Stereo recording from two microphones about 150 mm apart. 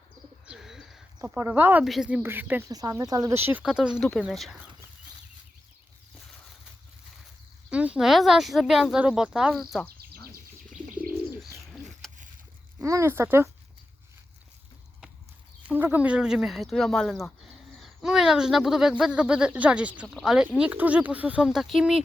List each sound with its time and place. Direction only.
0.4 s bird: 5° right (ahead or behind)
1.2 s speech: 15° right (ahead or behind)
1.8 s speech: 5° right (ahead or behind)
2.6 s speech: 25° right (ahead or behind)
3.6 s speech: 5° right (ahead or behind)
7.7 s speech: 10° right (ahead or behind)
12.0 s a sound: centre (ahead or behind)
12.8 s speech: 20° right (ahead or behind)
15.6 s speech: 10° right (ahead or behind)